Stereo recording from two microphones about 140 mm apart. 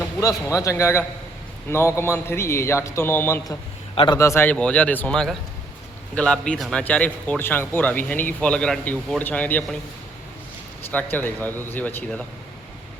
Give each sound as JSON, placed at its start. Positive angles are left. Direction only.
{"t": 0.0, "sound": "a man's voice", "side_deg": 20}
{"t": 3.9, "sound": "a man's voice", "side_deg": 35}
{"t": 4.2, "sound": "a man's voice", "side_deg": 20}
{"t": 10.9, "sound": "a man's voice", "side_deg": 10}